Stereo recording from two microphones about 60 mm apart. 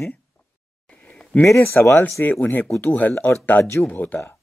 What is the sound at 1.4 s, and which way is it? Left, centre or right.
Speech, left.